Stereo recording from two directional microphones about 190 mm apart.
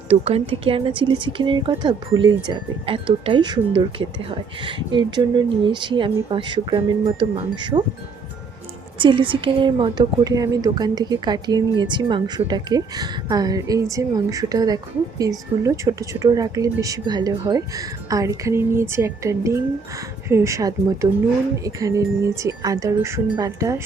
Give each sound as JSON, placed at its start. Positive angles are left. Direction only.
{"t": 0.1, "sound": "speech", "side_deg": -30}
{"t": 9.0, "sound": "a woman's voice", "side_deg": -25}